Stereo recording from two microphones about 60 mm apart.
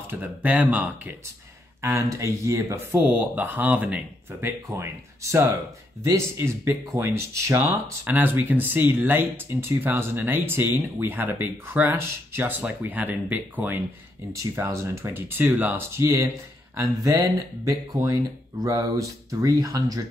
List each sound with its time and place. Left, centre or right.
0.2 s speech: right
1.8 s speech: right
3.0 s speech: right
4.7 s speech: right
8.0 s speech: right
14.3 s speech: right
15.0 s speech: right
16.0 s speech: right
16.7 s speech: right